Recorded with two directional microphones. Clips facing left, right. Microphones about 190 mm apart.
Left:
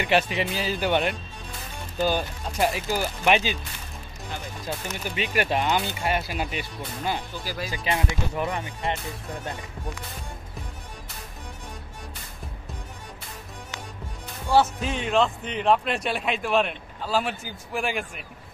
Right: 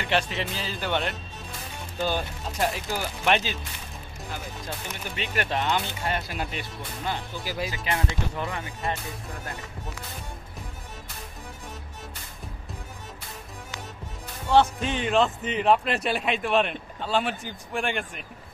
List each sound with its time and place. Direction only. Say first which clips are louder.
0.0 s speech: left 4 dB; 10° left (ahead or behind)
2.0 s a man's voice: left 3 dB; 5° left (ahead or behind)
5.0 s speech: left 4 dB; 5° left (ahead or behind)
7.4 s speech: right 5 dB; 20° right (ahead or behind)
7.7 s speech: left 2 dB; 20° left (ahead or behind)
14.5 s a man's voice: even; 5° left (ahead or behind)